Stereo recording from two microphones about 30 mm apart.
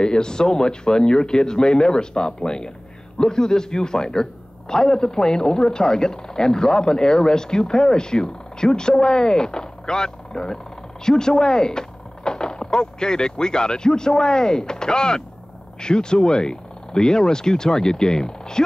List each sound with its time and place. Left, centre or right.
0.0 s a man's voice: left